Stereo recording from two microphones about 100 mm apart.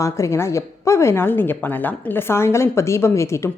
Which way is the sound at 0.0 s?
30° left (ahead or behind).